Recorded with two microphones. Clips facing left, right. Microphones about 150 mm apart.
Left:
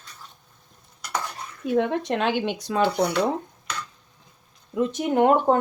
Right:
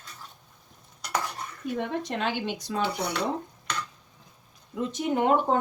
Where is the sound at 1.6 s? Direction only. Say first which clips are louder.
Left 8 dB; 90° left; by 2.8 s 70° left (ahead or behind).